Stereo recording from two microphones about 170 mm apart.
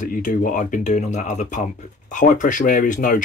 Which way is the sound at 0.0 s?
50° left (ahead or behind).